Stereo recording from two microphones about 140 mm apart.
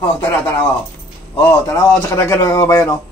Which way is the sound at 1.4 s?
20° left (ahead or behind).